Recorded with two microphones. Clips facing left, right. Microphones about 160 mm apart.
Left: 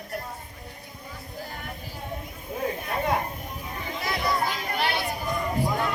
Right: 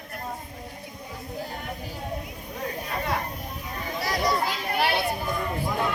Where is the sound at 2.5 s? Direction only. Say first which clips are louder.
Left 3 dB; 25° left (ahead or behind).